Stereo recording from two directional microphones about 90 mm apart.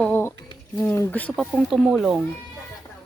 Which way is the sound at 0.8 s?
25° left (ahead or behind).